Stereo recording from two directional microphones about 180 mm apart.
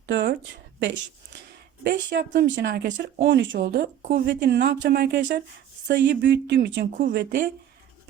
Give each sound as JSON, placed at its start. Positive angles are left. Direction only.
{"t": 0.0, "sound": "a sound", "side_deg": -80}
{"t": 1.8, "sound": "speech", "side_deg": -65}
{"t": 4.0, "sound": "speech", "side_deg": -60}
{"t": 5.9, "sound": "speech", "side_deg": -75}